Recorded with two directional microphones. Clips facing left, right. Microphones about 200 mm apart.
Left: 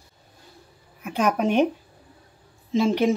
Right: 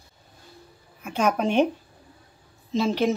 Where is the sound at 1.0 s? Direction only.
5° left (ahead or behind).